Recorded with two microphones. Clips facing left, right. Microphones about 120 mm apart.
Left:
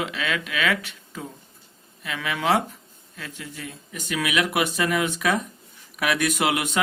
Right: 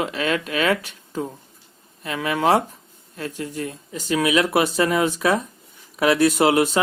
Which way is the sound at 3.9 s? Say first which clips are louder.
Right 6 dB; 30° right (ahead or behind).